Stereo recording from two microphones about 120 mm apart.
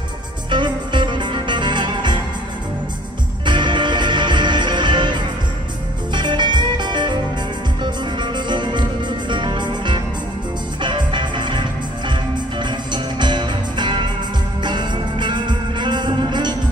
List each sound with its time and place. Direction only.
0.5 s music: 40° right (ahead or behind)
3.4 s music: 40° right (ahead or behind)